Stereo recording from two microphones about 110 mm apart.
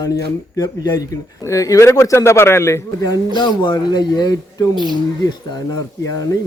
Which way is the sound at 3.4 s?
45° left (ahead or behind).